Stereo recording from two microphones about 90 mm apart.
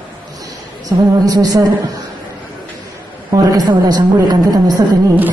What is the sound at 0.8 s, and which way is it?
Speech, 40° right (ahead or behind).